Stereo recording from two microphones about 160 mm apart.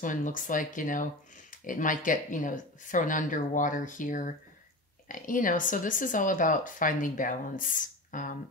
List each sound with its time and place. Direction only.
0.0 s speech: 55° left (ahead or behind)